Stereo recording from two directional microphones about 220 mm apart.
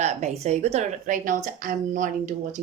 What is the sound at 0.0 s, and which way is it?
Speech, 30° right (ahead or behind).